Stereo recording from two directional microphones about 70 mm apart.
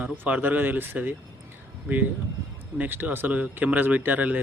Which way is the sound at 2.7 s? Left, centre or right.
Right.